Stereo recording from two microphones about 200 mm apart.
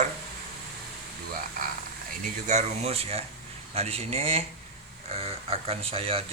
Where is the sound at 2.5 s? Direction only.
30° right (ahead or behind).